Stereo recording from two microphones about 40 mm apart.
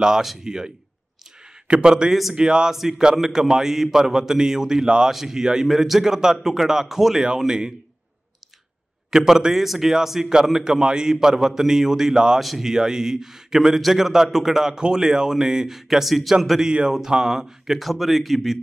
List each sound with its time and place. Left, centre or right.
0.0 s a man's voice: centre
1.4 s a sound: centre
2.3 s a man's voice: centre
4.8 s speech: right
5.1 s a man's voice: centre
9.1 s a man's voice: centre
12.4 s a man's voice: centre